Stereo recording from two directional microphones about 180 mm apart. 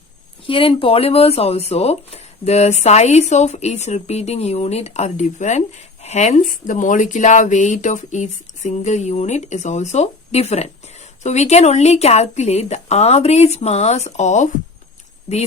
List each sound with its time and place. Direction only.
0.4 s speech: 30° left (ahead or behind)